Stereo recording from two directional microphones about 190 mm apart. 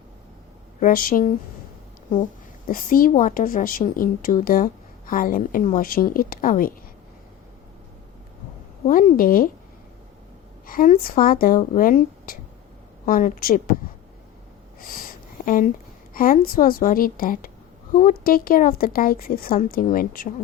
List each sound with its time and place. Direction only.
0.8 s a woman's voice: 45° left (ahead or behind)
2.6 s a woman's voice: 45° left (ahead or behind)
8.9 s a woman's voice: 45° left (ahead or behind)
10.7 s a woman's voice: 50° left (ahead or behind)
14.8 s a sound: 50° left (ahead or behind)
16.1 s a woman's voice: 45° left (ahead or behind)